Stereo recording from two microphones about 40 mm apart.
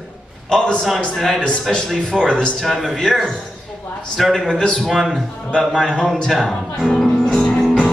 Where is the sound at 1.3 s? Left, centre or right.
Left.